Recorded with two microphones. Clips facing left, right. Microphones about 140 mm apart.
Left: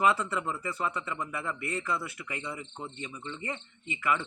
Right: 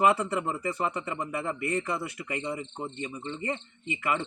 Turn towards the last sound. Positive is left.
turn(degrees=-30)  # may be behind; listen again after turning